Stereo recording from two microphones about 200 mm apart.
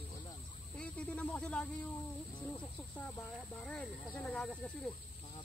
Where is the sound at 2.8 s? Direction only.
5° left (ahead or behind).